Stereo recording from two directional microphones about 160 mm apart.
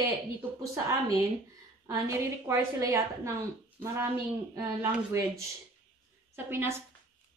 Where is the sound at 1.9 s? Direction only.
15° right (ahead or behind).